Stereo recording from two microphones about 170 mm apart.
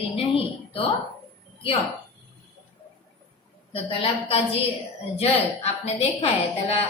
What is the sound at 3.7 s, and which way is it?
A woman's voice, 35° left (ahead or behind).